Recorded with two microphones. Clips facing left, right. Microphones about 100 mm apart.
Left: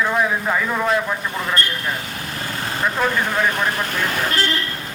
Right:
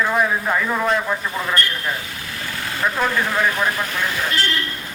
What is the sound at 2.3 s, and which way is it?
Vehicle, 35° left (ahead or behind).